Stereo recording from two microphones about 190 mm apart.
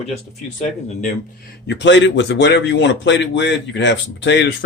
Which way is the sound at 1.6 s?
65° left (ahead or behind).